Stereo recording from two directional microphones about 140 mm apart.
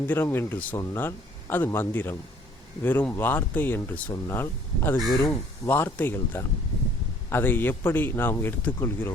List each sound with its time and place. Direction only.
0.1 s a man's voice: 15° left (ahead or behind)